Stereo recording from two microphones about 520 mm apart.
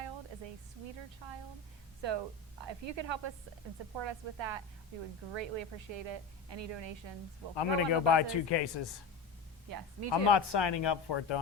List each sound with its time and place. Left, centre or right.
1.2 s a woman's voice: right
7.5 s a man's voice: left
9.6 s speech: right
10.1 s speech: left